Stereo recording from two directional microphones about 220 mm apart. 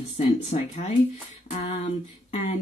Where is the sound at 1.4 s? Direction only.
30° left (ahead or behind).